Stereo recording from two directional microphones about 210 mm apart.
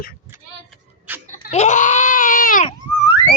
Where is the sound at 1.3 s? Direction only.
35° left (ahead or behind).